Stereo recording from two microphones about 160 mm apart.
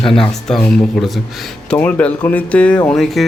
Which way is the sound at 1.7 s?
10° left (ahead or behind).